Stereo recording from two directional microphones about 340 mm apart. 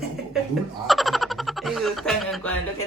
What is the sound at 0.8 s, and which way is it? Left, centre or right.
Speech, centre.